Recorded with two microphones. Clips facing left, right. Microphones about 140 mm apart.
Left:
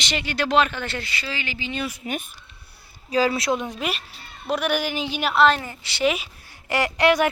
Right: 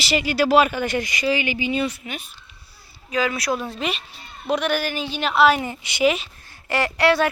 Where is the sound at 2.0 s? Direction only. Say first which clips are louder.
Left 4 dB; 30° left (ahead or behind); by 5.3 s 10° left (ahead or behind).